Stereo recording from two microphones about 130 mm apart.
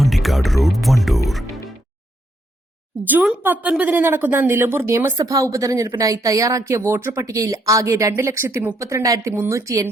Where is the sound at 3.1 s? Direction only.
15° right (ahead or behind).